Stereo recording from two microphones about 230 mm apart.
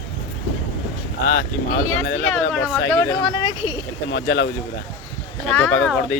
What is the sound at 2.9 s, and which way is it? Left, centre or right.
Speech, centre.